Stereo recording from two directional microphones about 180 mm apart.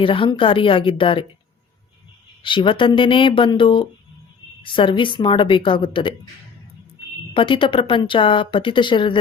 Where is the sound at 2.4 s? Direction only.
30° left (ahead or behind).